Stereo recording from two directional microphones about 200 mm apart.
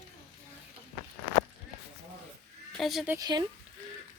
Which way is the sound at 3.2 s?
20° right (ahead or behind).